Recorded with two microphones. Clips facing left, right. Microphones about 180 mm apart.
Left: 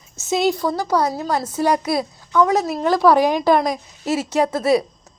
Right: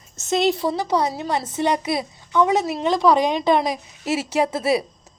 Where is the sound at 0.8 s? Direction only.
20° right (ahead or behind).